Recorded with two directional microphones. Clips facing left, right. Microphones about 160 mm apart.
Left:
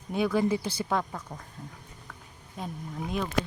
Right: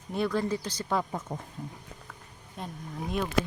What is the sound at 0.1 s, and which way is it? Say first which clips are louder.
Speech: left 3 dB; 5° left (ahead or behind).